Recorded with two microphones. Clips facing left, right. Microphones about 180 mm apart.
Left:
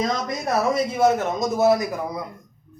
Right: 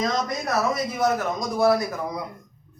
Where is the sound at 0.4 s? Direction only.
30° left (ahead or behind).